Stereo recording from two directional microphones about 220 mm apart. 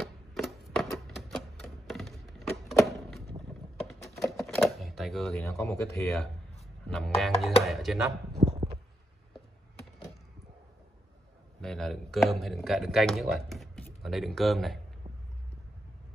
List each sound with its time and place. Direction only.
0.0 s typewriter: centre (ahead or behind)
1.6 s a sound: centre (ahead or behind)
3.8 s typewriter: centre (ahead or behind)
5.6 s speech: 10° left (ahead or behind)
6.9 s music: centre (ahead or behind)
8.5 s a sound: 25° right (ahead or behind)
11.6 s speech: centre (ahead or behind)